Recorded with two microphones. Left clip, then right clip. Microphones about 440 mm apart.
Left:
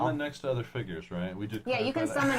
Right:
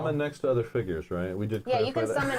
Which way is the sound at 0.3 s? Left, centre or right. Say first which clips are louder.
Right 6 dB; right.